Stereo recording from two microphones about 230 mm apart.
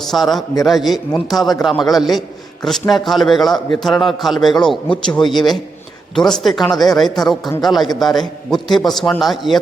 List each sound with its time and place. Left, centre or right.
0.0 s a man's voice: centre